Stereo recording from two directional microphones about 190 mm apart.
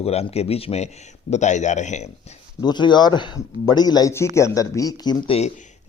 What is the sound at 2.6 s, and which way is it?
Speech, 25° left (ahead or behind).